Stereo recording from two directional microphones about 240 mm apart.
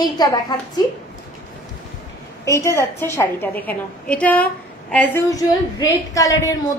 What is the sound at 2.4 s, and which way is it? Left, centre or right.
A woman's voice, centre.